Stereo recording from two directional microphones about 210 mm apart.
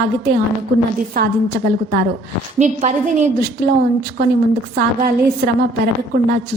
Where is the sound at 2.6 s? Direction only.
35° right (ahead or behind).